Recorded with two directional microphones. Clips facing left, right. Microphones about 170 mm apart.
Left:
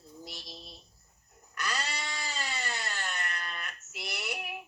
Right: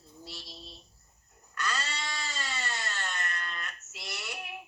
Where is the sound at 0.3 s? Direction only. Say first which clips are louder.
Even; 15° left (ahead or behind).